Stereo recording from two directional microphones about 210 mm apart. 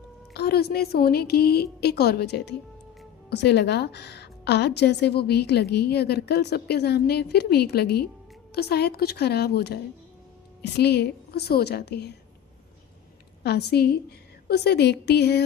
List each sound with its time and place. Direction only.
0.3 s a woman's voice: 50° left (ahead or behind)
13.4 s a woman's voice: 50° left (ahead or behind)